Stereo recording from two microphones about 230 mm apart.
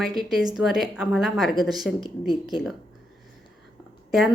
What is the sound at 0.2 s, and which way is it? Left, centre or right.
A woman's voice, centre.